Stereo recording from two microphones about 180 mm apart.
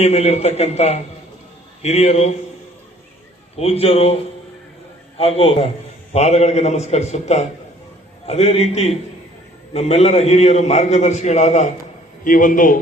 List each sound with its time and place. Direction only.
0.0 s a man's voice: 35° left (ahead or behind)
3.6 s a man's voice: 35° left (ahead or behind)